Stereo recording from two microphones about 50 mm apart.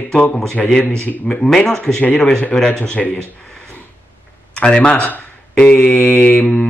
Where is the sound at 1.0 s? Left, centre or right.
Left.